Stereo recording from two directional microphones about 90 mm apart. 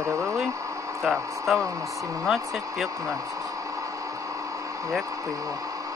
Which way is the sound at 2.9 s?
40° right (ahead or behind).